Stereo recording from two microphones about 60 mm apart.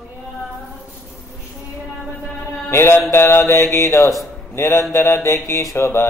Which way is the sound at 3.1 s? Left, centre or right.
Left.